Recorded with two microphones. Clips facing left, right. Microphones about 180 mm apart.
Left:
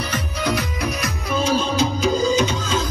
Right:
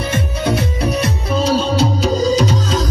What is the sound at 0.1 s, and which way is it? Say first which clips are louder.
Music: right 5 dB; 30° right (ahead or behind).